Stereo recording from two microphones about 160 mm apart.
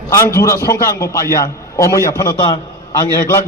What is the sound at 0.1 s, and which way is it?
A man's voice, 15° left (ahead or behind).